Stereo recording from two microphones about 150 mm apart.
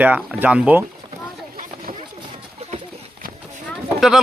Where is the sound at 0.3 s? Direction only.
10° right (ahead or behind).